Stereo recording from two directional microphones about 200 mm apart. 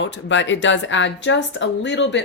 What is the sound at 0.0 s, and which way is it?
A woman's voice, 65° left (ahead or behind).